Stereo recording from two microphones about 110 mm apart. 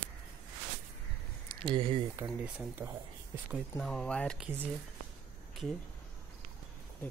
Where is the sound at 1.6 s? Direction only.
50° right (ahead or behind).